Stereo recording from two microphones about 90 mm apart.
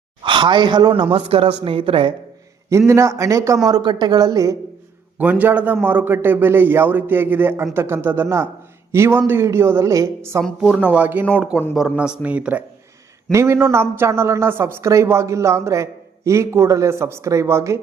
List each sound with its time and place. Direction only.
0.2 s a woman's voice: 65° right (ahead or behind)
1.1 s a man's voice: 90° right
2.6 s speech: 35° right (ahead or behind)
3.7 s speech: 50° right (ahead or behind)
5.1 s a man's voice: 20° right (ahead or behind)
10.6 s speech: 15° right (ahead or behind)
13.3 s speech: 30° right (ahead or behind)